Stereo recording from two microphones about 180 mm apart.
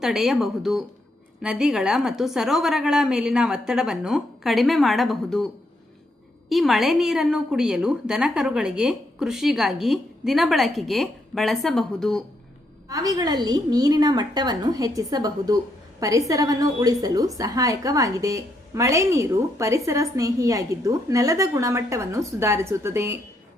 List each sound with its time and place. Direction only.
0.0 s a woman's voice: centre (ahead or behind)
6.5 s a woman's voice: centre (ahead or behind)
12.9 s a woman's voice: 20° right (ahead or behind)